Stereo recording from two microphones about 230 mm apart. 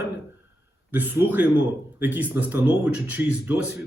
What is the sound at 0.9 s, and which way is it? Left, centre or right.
Speech, centre.